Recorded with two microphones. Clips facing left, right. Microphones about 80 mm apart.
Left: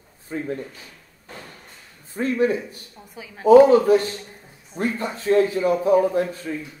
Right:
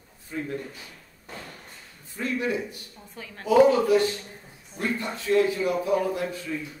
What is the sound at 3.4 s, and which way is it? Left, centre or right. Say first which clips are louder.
A man's voice: left 7 dB; left.